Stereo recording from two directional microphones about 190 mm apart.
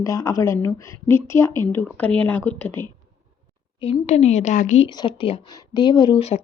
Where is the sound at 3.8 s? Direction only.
35° left (ahead or behind).